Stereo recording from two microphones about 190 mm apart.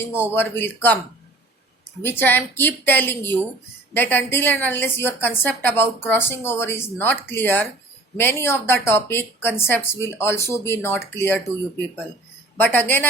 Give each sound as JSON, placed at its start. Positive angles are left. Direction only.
{"t": 0.1, "sound": "a woman's voice", "side_deg": 10}
{"t": 2.0, "sound": "a woman's voice", "side_deg": 10}
{"t": 12.5, "sound": "a woman's voice", "side_deg": 10}